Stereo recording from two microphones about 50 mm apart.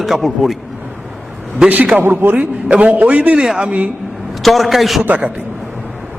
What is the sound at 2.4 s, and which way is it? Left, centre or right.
Speech, right.